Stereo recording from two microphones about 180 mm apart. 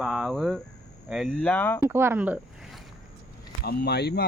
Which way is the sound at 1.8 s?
15° right (ahead or behind).